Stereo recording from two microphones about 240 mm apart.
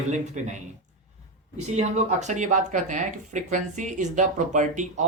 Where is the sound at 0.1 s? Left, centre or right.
Right.